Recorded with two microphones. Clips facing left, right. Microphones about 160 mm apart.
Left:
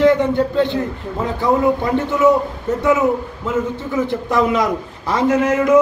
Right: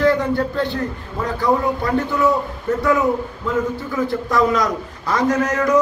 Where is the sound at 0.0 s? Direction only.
20° left (ahead or behind).